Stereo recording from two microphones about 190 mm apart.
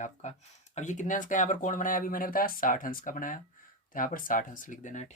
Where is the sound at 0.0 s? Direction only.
35° left (ahead or behind).